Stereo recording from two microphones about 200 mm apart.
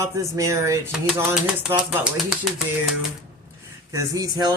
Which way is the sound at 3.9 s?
20° right (ahead or behind).